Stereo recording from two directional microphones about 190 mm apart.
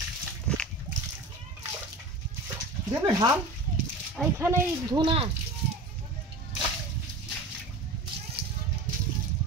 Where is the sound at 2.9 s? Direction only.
20° right (ahead or behind).